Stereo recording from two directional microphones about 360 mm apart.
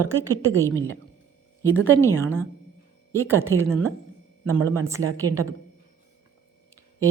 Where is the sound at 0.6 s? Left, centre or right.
Centre.